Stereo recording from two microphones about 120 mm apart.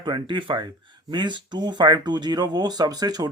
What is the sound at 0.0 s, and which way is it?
Speech, 40° right (ahead or behind).